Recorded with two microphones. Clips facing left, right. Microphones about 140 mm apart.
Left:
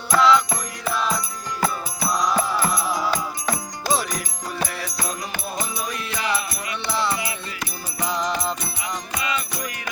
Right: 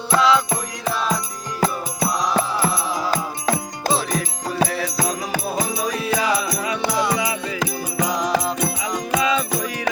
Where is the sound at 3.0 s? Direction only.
35° right (ahead or behind).